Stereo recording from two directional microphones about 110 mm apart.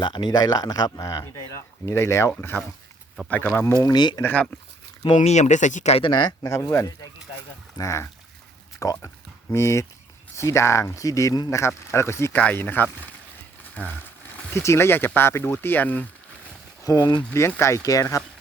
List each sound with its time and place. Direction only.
0.0 s speech: 45° left (ahead or behind); by 3.5 s 15° left (ahead or behind)
3.8 s speech: 40° left (ahead or behind)
4.2 s speech: 15° left (ahead or behind)
5.1 s speech: 90° left
6.0 s speech: 45° left (ahead or behind)
6.5 s speech: 25° left (ahead or behind)
16.8 s speech: 35° left (ahead or behind)
17.3 s speech: 25° left (ahead or behind)